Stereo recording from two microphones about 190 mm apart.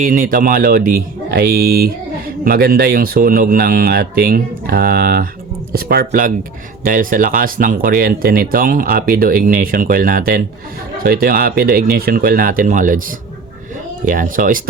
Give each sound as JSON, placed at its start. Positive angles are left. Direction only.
{"t": 0.0, "sound": "speech", "side_deg": -45}